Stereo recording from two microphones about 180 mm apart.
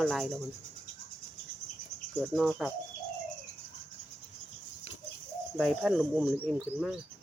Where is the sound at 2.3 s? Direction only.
Centre (ahead or behind).